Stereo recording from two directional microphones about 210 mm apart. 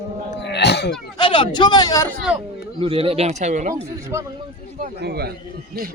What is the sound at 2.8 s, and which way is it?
Speech, 25° right (ahead or behind).